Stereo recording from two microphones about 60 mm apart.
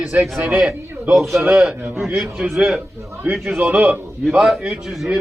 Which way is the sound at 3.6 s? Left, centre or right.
Right.